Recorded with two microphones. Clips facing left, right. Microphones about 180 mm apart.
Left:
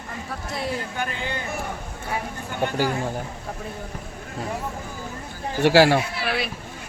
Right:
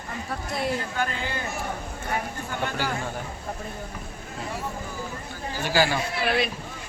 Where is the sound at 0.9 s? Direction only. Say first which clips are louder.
Even; 20° left (ahead or behind).